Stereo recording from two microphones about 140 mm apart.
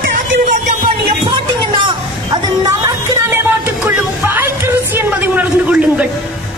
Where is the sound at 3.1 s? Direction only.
20° right (ahead or behind).